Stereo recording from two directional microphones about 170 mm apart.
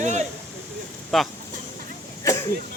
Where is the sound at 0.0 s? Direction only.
45° right (ahead or behind).